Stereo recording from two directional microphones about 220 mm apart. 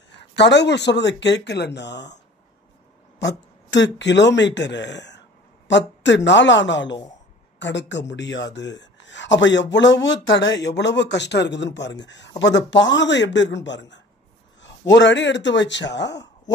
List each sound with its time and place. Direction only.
0.4 s speech: 50° left (ahead or behind)
3.2 s speech: 55° left (ahead or behind)